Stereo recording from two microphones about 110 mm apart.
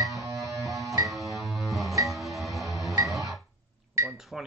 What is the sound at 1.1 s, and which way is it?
Music, centre (ahead or behind).